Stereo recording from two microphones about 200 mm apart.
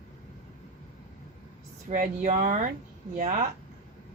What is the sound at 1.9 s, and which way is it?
Speech, 40° right (ahead or behind).